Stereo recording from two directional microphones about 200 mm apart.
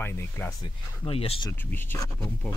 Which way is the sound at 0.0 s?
10° left (ahead or behind).